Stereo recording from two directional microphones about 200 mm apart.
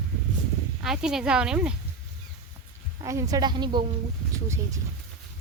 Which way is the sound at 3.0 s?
15° right (ahead or behind).